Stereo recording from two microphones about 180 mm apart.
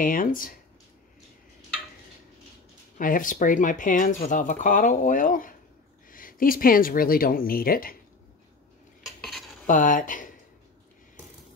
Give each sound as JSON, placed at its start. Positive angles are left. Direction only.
{"t": 0.0, "sound": "speech", "side_deg": 50}
{"t": 3.0, "sound": "speech", "side_deg": 50}
{"t": 9.0, "sound": "dishes", "side_deg": 0}
{"t": 9.7, "sound": "speech", "side_deg": 45}